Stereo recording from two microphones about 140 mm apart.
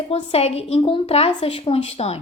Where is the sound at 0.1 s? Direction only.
45° left (ahead or behind).